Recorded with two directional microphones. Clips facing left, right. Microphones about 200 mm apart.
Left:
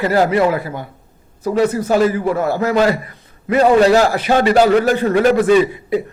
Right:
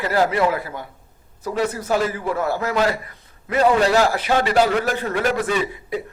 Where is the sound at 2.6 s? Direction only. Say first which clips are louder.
Left 6 dB; 35° left (ahead or behind).